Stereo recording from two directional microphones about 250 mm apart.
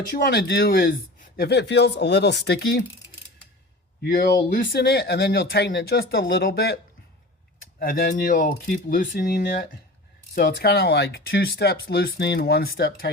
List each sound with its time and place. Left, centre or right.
0.1 s speech: left
4.0 s speech: left
7.8 s speech: left